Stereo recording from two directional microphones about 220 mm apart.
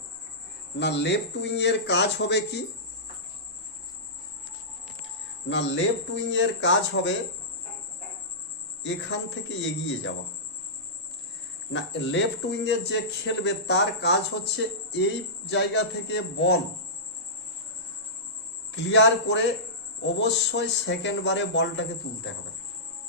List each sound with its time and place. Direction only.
0.8 s speech: 50° left (ahead or behind)
5.5 s speech: 55° left (ahead or behind)
8.8 s speech: 55° left (ahead or behind)
11.7 s speech: 55° left (ahead or behind)
18.7 s speech: 55° left (ahead or behind)